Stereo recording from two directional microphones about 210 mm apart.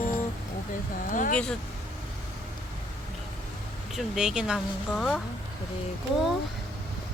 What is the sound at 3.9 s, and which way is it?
Speech, centre (ahead or behind).